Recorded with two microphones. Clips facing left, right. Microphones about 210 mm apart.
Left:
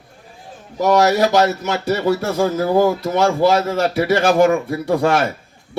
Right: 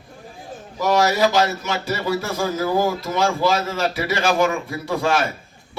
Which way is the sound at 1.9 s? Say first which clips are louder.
Left 6 dB; 60° left (ahead or behind).